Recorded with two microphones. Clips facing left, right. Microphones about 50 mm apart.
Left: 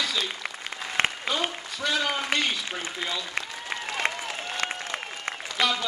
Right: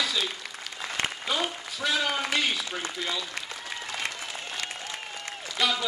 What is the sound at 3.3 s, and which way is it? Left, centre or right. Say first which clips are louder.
Applause: left 4 dB; left.